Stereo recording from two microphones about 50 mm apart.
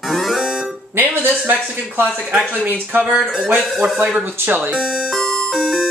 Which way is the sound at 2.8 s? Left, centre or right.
Right.